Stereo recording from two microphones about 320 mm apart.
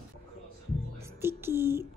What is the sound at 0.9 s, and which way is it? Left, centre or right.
Whispering, centre.